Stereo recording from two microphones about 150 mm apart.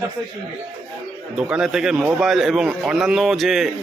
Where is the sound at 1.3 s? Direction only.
5° right (ahead or behind).